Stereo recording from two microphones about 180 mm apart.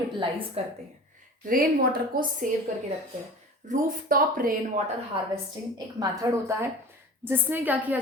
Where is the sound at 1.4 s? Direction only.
50° right (ahead or behind).